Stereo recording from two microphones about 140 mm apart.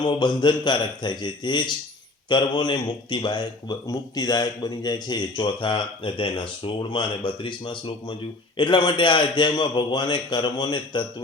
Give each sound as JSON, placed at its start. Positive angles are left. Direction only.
{"t": 0.0, "sound": "a man's voice", "side_deg": 30}